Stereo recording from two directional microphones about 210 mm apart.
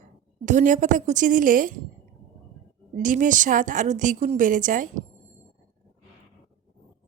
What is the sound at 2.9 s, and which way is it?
A woman's voice, 40° right (ahead or behind).